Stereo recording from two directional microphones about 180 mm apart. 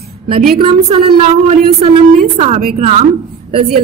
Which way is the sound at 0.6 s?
30° right (ahead or behind).